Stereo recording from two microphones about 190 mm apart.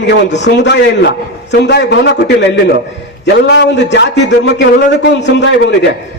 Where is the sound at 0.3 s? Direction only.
70° left (ahead or behind).